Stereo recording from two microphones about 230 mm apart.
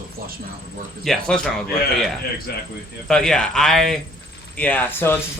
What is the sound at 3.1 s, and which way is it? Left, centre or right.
Speech, centre.